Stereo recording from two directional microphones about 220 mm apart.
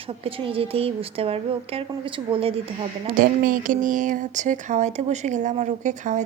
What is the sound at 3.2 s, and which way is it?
A woman's voice, 40° right (ahead or behind).